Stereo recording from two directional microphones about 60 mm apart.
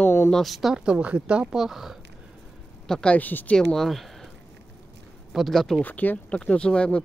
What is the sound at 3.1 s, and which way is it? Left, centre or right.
Speech, left.